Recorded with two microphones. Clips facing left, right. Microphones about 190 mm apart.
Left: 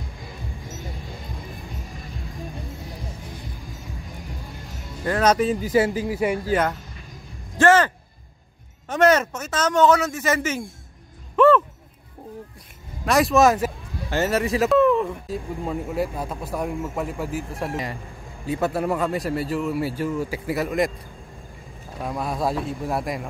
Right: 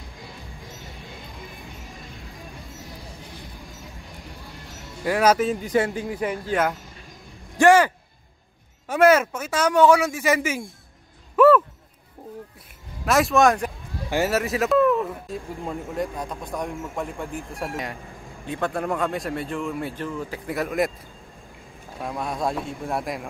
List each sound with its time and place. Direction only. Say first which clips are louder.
5.0 s speech: even; 10° right (ahead or behind); by 6.6 s 10° left (ahead or behind)
7.5 s speech: right 1 dB; 15° right (ahead or behind)
11.3 s a sound: right 1 dB; 10° right (ahead or behind)
13.0 s speech: left 1 dB; centre (ahead or behind)
22.0 s speech: left 2 dB; centre (ahead or behind)